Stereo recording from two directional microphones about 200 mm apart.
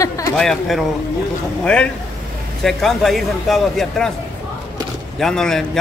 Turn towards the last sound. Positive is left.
turn(degrees=5)  # may be behind; listen again after turning